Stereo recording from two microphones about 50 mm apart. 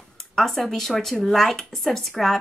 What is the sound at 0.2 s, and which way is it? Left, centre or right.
Speech, centre.